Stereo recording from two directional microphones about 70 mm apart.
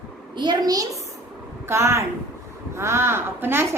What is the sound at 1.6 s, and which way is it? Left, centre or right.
A woman's voice, right.